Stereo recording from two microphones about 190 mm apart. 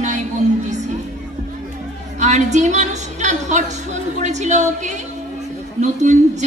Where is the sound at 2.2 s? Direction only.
40° right (ahead or behind).